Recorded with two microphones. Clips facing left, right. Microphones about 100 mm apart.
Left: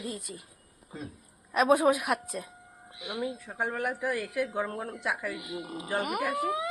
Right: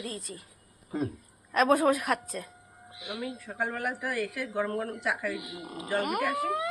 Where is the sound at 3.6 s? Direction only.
15° left (ahead or behind).